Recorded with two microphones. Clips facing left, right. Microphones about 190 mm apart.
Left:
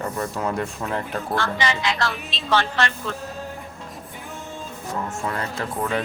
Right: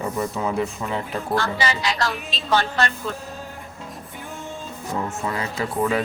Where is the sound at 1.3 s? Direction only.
40° right (ahead or behind).